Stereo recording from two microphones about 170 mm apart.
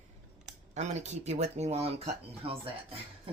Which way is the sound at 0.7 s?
40° right (ahead or behind).